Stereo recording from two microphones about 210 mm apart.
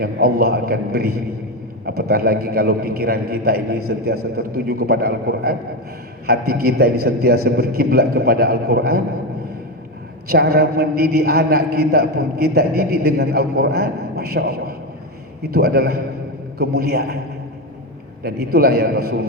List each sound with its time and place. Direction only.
0.0 s a man's voice: 45° right (ahead or behind)
10.2 s a man's voice: 50° right (ahead or behind)
18.2 s a man's voice: 45° right (ahead or behind)